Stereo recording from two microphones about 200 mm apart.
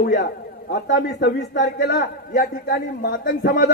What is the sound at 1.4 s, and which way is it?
A man's voice, 40° left (ahead or behind).